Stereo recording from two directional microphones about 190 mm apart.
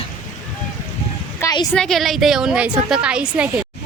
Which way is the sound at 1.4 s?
20° left (ahead or behind).